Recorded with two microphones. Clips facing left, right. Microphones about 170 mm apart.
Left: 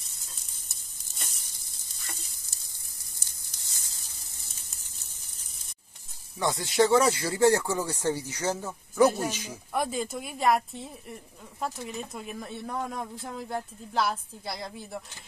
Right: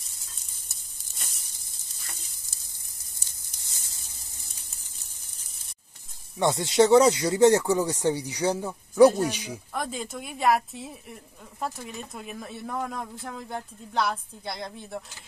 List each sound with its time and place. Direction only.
0.7 s a sound: centre (ahead or behind)
6.4 s speech: 25° right (ahead or behind)
9.7 s speech: 5° left (ahead or behind)